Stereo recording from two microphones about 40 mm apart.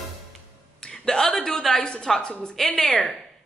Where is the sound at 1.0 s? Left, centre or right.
Centre.